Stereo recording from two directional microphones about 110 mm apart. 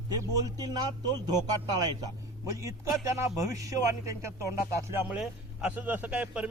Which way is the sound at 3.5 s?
30° right (ahead or behind).